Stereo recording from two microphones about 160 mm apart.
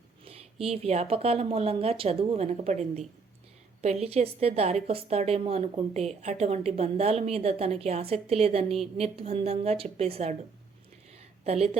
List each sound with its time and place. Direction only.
0.3 s a woman's voice: 40° right (ahead or behind)
11.4 s a woman's voice: 40° right (ahead or behind)